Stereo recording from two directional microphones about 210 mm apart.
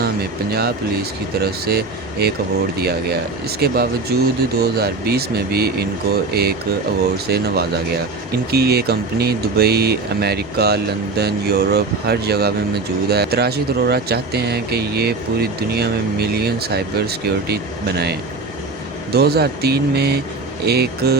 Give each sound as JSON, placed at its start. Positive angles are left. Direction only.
{"t": 1.4, "sound": "speech", "side_deg": -50}